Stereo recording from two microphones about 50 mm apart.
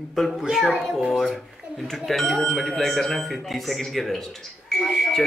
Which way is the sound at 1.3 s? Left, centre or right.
Centre.